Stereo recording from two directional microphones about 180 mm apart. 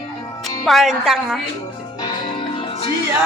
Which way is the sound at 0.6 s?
Centre (ahead or behind).